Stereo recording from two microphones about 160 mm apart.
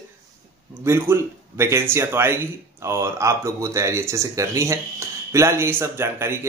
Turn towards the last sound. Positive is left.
turn(degrees=-15)  # may be behind; listen again after turning